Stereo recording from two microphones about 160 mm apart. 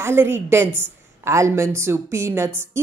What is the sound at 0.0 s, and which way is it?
Speech, 15° right (ahead or behind).